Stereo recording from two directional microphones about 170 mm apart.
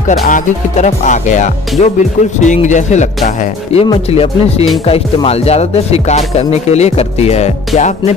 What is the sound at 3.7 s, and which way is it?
Speech, 30° left (ahead or behind).